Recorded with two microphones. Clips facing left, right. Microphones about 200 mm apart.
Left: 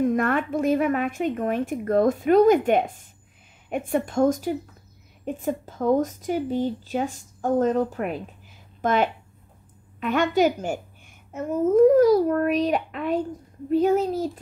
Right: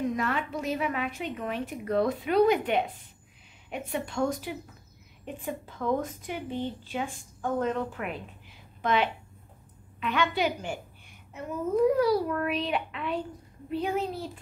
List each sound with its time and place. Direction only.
0.0 s a woman's voice: 50° left (ahead or behind)